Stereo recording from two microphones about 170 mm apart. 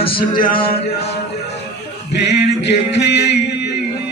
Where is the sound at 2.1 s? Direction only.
85° left.